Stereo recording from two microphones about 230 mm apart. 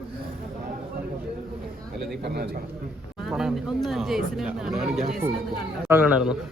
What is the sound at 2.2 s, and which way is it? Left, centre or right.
Speech, right.